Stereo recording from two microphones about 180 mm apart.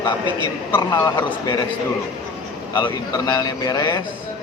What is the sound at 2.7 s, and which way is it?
A man's voice, 20° left (ahead or behind).